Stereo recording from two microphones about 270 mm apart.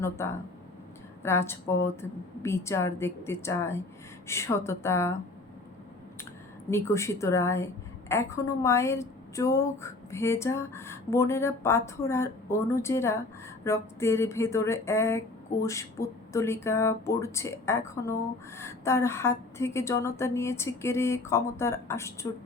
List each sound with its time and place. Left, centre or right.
0.0 s speech: centre
6.7 s speech: centre